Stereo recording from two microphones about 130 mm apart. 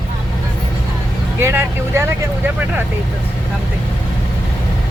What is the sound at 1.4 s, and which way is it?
Speech, 20° right (ahead or behind).